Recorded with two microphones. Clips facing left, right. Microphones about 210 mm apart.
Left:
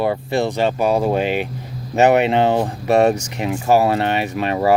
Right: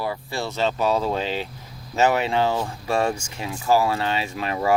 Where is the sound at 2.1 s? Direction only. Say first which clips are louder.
Left 7 dB; 65° left (ahead or behind).